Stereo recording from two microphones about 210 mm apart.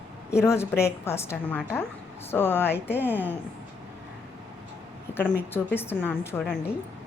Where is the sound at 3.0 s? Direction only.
10° right (ahead or behind).